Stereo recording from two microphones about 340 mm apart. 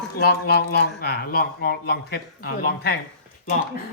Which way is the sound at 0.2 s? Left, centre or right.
Left.